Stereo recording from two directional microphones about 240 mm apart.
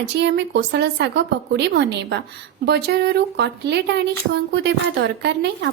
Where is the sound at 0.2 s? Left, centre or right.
Right.